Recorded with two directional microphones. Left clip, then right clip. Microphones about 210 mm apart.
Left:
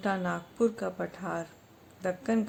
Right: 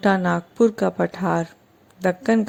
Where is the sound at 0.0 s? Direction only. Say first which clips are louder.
Right 11 dB; 35° right (ahead or behind).